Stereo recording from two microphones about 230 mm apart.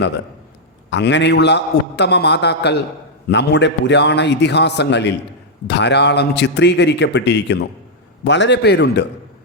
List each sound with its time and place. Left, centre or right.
0.9 s a man's voice: left